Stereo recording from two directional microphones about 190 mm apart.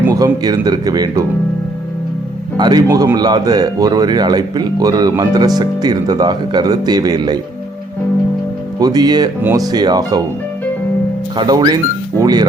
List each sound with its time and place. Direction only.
0.0 s speech: 20° right (ahead or behind)
2.6 s speech: 20° right (ahead or behind)
8.8 s speech: 20° right (ahead or behind)
11.3 s speech: 20° right (ahead or behind)